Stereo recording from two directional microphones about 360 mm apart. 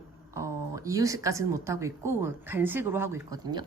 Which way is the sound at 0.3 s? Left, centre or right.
Centre.